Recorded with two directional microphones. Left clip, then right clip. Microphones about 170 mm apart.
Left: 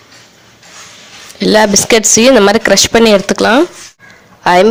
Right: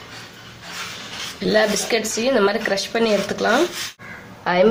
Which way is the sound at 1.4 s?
60° left (ahead or behind).